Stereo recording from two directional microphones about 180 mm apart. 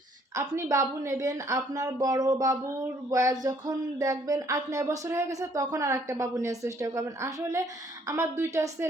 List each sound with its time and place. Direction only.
0.3 s a woman's voice: 15° right (ahead or behind)